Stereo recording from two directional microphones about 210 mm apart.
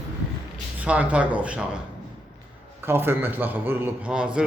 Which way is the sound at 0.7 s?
5° right (ahead or behind).